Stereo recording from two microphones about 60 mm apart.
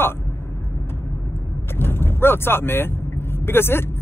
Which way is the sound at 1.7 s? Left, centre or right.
Left.